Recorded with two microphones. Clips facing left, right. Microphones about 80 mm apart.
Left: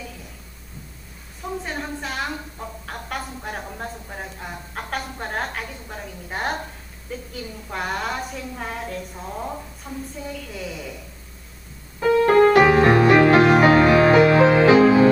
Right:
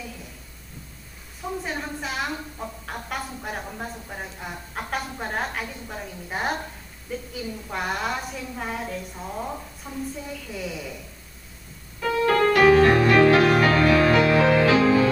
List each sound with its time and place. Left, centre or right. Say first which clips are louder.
1.6 s a woman's voice: left 1 dB; centre
11.9 s music: left 6 dB; left